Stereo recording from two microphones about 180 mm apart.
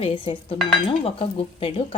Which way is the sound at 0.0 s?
30° left (ahead or behind).